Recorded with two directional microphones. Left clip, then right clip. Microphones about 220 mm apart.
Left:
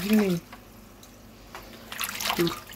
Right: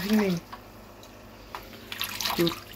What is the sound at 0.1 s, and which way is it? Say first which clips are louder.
Speech: left 2 dB; 30° left (ahead or behind).